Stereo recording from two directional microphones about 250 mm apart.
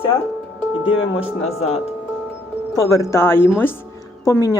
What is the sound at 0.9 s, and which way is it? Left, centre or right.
Speech, left.